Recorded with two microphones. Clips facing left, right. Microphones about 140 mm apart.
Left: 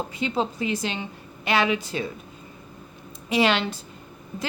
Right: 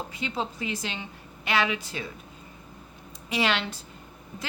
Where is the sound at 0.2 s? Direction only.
25° left (ahead or behind).